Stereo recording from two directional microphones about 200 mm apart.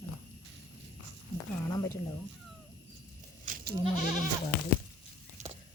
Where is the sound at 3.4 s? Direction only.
45° right (ahead or behind).